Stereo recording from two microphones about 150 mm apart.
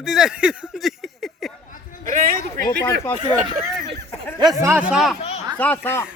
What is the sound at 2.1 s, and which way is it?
Speech, 65° right (ahead or behind).